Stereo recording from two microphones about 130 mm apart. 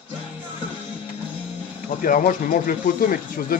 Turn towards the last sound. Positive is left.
turn(degrees=90)